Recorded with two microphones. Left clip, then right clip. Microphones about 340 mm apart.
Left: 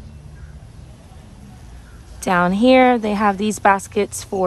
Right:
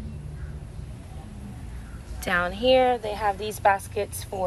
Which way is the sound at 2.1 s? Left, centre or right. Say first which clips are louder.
Left 8 dB; centre.